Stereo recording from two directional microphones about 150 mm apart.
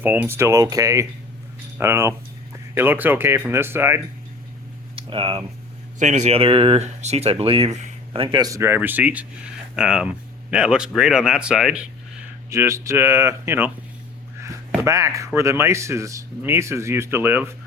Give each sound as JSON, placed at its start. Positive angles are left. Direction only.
{"t": 0.0, "sound": "speech", "side_deg": -10}
{"t": 4.9, "sound": "a sound", "side_deg": -35}
{"t": 6.0, "sound": "speech", "side_deg": -55}
{"t": 12.5, "sound": "speech", "side_deg": -20}
{"t": 14.8, "sound": "speech", "side_deg": -20}